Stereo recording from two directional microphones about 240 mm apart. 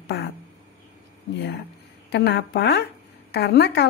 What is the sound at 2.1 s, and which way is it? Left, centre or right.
A woman's voice, left.